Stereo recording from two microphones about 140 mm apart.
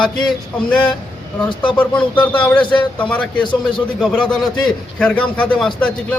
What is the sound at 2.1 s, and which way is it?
A man's voice, 10° left (ahead or behind).